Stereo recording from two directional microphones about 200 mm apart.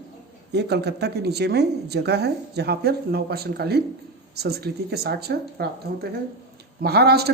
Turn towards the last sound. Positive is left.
turn(degrees=-55)  # may be behind; listen again after turning